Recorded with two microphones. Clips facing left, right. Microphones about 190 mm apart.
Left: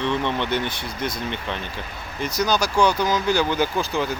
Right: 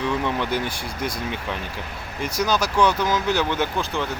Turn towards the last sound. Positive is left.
turn(degrees=5)  # may be behind; listen again after turning